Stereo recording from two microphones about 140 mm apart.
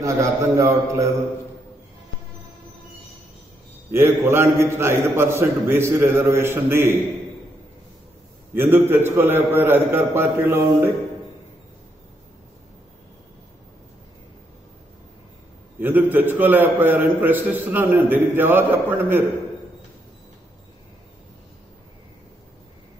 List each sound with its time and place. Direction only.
0.0 s a man's voice: 20° right (ahead or behind)
3.9 s a man's voice: 15° right (ahead or behind)
8.5 s a man's voice: 15° right (ahead or behind)
15.8 s a man's voice: 15° right (ahead or behind)